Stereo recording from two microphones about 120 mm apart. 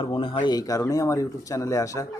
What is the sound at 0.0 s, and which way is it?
Speech, 45° left (ahead or behind).